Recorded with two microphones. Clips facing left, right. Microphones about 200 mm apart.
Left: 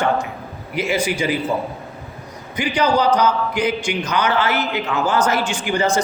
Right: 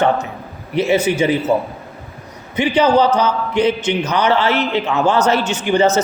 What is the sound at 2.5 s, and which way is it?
A man's voice, 25° right (ahead or behind).